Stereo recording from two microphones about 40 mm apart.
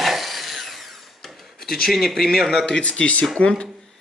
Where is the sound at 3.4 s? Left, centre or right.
Left.